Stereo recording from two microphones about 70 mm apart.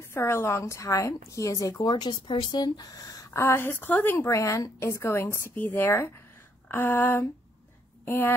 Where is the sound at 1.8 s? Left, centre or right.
Left.